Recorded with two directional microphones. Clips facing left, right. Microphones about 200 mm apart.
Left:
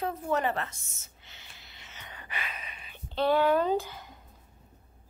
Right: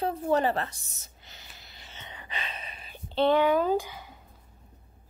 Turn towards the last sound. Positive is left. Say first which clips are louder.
# right 1 dB
turn(degrees=-10)  # may be behind; listen again after turning